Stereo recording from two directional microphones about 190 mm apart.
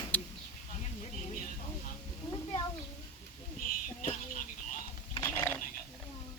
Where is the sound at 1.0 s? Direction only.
35° left (ahead or behind).